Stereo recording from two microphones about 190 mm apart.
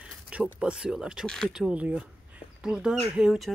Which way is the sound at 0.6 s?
5° right (ahead or behind).